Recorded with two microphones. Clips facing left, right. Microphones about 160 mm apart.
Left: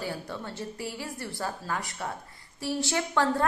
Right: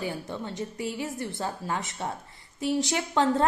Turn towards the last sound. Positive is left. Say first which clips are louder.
# right 2 dB
turn(degrees=-20)  # may be behind; listen again after turning